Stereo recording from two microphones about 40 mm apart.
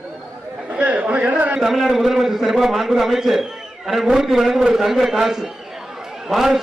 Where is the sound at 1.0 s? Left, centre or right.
Right.